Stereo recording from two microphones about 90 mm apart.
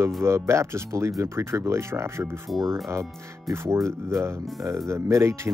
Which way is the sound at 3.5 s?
30° right (ahead or behind).